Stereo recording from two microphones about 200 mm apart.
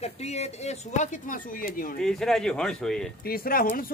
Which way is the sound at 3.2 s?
45° left (ahead or behind).